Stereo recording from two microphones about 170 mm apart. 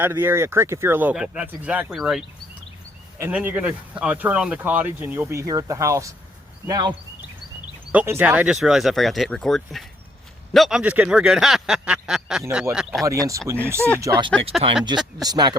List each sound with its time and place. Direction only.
0.0 s speech: 10° right (ahead or behind)
7.9 s speech: 10° right (ahead or behind)
13.1 s speech: 20° right (ahead or behind)
14.3 s speech: 5° left (ahead or behind)
14.8 s speech: 25° right (ahead or behind)